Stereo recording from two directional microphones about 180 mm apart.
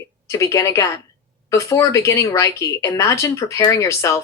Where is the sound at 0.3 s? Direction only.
15° left (ahead or behind).